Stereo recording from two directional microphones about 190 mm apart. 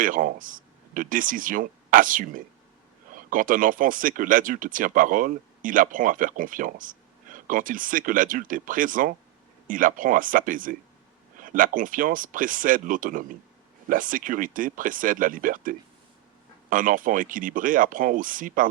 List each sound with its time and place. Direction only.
0.0 s speech: 45° right (ahead or behind)